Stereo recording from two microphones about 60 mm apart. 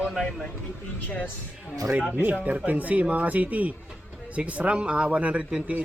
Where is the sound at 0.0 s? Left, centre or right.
Centre.